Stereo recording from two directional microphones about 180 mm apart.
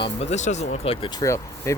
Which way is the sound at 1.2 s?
15° left (ahead or behind).